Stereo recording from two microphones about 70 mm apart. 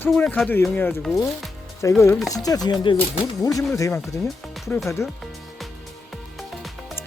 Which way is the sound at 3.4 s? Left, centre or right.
Left.